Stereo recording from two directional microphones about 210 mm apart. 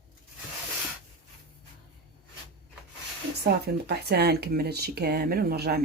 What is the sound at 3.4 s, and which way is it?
Speech, 50° right (ahead or behind).